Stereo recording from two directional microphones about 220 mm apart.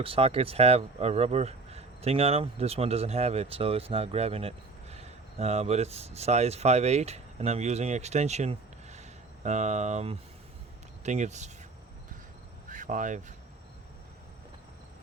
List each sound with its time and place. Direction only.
0.0 s speech: 25° right (ahead or behind)
12.6 s cricket: 35° right (ahead or behind)